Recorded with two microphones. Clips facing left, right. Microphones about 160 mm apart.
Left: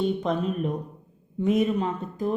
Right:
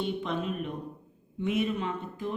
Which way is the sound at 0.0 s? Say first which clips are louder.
Left 6 dB; 40° left (ahead or behind).